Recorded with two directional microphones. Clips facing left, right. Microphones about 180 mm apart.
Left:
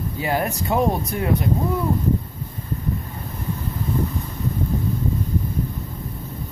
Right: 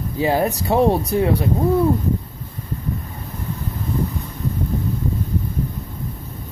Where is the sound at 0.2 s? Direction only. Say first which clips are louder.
Right 5 dB; 35° right (ahead or behind).